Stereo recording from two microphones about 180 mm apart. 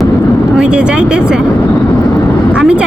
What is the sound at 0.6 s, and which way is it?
Speech, 5° right (ahead or behind).